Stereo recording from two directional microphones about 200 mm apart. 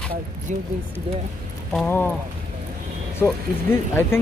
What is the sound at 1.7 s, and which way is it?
Speech, 5° left (ahead or behind).